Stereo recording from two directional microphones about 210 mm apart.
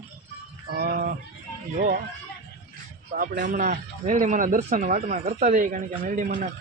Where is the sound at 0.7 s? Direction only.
40° right (ahead or behind).